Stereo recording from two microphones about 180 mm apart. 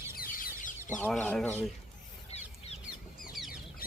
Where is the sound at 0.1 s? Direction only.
55° left (ahead or behind).